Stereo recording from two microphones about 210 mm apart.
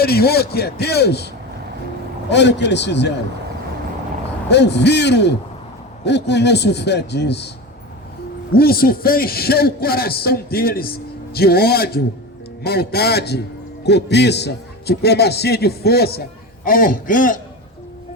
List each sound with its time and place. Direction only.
0.0 s a man's voice: 50° left (ahead or behind)
2.3 s speech: 55° left (ahead or behind)
4.4 s a man's voice: 55° left (ahead or behind)
8.5 s a man's voice: 45° left (ahead or behind)